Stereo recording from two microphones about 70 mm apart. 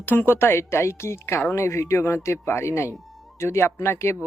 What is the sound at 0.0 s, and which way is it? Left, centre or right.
Speech, left.